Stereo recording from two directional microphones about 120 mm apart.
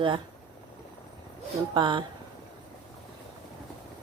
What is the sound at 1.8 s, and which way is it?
Speech, 40° right (ahead or behind).